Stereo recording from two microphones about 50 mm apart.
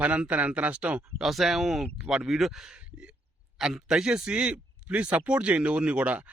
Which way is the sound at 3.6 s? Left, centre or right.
Centre.